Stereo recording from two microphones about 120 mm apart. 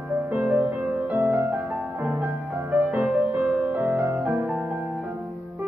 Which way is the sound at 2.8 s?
10° right (ahead or behind).